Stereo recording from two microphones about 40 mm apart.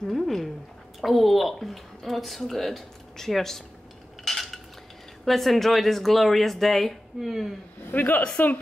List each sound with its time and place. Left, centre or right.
0.1 s speech: centre
4.2 s cutlery: centre
5.2 s speech: centre
7.2 s speech: centre
7.9 s a man's voice: left